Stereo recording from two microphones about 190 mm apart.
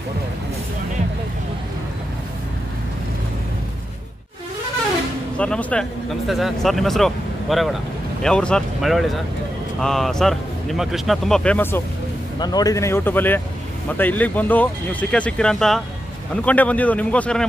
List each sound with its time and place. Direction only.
5.4 s speech: 5° left (ahead or behind)
12.4 s speech: 20° left (ahead or behind); by 17.5 s 5° left (ahead or behind)